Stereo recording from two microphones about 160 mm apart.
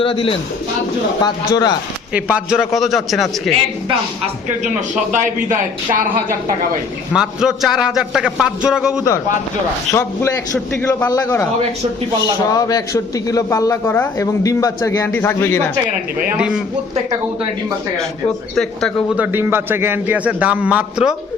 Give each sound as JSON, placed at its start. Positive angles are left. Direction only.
{"t": 0.0, "sound": "a man's voice", "side_deg": 35}
{"t": 2.1, "sound": "a man's voice", "side_deg": -10}
{"t": 5.1, "sound": "speech", "side_deg": -55}
{"t": 7.1, "sound": "a man's voice", "side_deg": -5}
{"t": 9.9, "sound": "a man's voice", "side_deg": 20}
{"t": 10.7, "sound": "a man's voice", "side_deg": 5}
{"t": 11.0, "sound": "a man's voice", "side_deg": 20}
{"t": 12.5, "sound": "a man's voice", "side_deg": 25}
{"t": 16.4, "sound": "a man's voice", "side_deg": -5}
{"t": 18.5, "sound": "a man's voice", "side_deg": 0}
{"t": 19.1, "sound": "a man's voice", "side_deg": -10}